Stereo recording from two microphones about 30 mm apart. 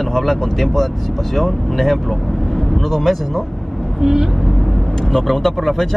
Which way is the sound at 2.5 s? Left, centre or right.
Centre.